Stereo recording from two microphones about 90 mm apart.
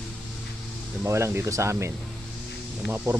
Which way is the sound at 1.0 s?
30° right (ahead or behind).